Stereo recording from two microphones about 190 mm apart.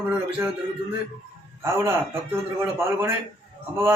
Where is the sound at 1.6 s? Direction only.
15° right (ahead or behind).